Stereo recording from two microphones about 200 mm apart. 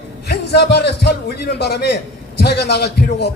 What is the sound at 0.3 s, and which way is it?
A man's voice, 55° left (ahead or behind).